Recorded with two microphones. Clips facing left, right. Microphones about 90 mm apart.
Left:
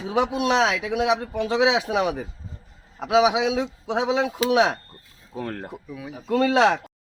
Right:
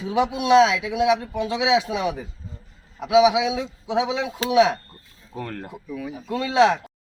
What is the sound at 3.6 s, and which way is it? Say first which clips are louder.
Speech: right 1 dB; 50° left (ahead or behind).